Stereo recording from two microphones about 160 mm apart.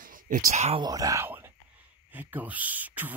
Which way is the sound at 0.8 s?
20° right (ahead or behind).